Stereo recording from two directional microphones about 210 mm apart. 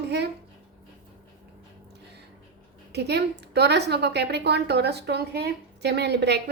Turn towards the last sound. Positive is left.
turn(degrees=-50)  # may be behind; listen again after turning